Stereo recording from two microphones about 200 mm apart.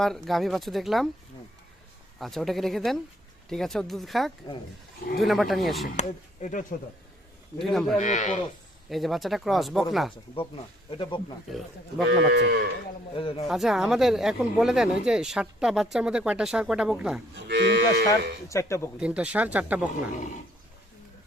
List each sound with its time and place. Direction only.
0.0 s speech: centre (ahead or behind)
2.1 s speech: centre (ahead or behind)
6.0 s speech: 40° left (ahead or behind)
7.6 s speech: centre (ahead or behind)
7.9 s speech: 35° left (ahead or behind)
8.9 s speech: centre (ahead or behind)
10.9 s speech: 25° left (ahead or behind)
11.5 s speech: centre (ahead or behind)
12.2 s cattle: 55° right (ahead or behind)
13.1 s speech: 25° left (ahead or behind)
13.5 s speech: centre (ahead or behind)
17.3 s cattle: 60° right (ahead or behind)
18.4 s speech: 15° left (ahead or behind)
18.9 s speech: 5° right (ahead or behind)